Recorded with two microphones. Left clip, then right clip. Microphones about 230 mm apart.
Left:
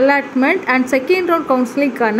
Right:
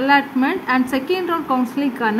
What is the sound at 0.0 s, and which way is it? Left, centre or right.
A woman's voice, centre.